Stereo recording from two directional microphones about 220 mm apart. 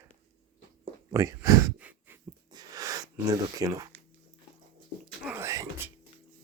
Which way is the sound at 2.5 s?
15° right (ahead or behind).